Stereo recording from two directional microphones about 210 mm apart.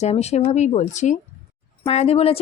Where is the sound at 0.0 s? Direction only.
30° left (ahead or behind).